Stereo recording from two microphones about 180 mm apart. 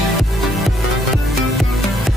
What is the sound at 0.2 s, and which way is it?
Music, centre (ahead or behind).